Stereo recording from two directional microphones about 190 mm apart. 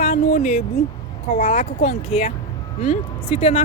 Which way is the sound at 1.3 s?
50° left (ahead or behind).